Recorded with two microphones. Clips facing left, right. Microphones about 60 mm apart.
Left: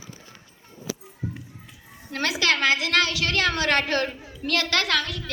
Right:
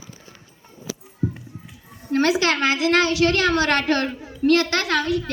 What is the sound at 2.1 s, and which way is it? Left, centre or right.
A woman's voice, right.